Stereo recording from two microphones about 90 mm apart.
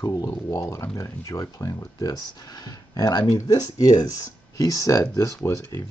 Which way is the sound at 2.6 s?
45° left (ahead or behind).